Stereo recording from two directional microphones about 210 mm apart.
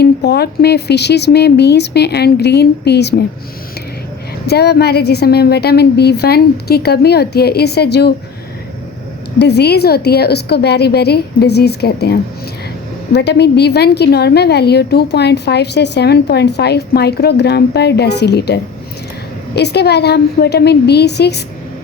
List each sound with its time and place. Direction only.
0.0 s a woman's voice: 50° left (ahead or behind)
4.4 s a woman's voice: 50° left (ahead or behind)
9.4 s a woman's voice: 50° left (ahead or behind)
13.1 s a woman's voice: 50° left (ahead or behind)